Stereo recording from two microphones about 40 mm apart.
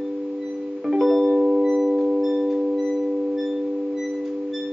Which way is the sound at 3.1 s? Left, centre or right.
Centre.